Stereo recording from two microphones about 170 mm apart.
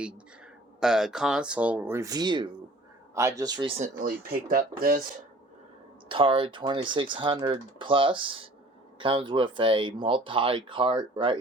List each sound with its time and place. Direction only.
0.8 s speech: 5° right (ahead or behind); by 3.8 s 25° right (ahead or behind)
3.8 s speech: 50° right (ahead or behind)
6.1 s speech: 30° right (ahead or behind)